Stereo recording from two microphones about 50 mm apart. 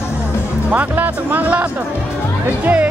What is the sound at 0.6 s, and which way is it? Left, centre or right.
Speech, right.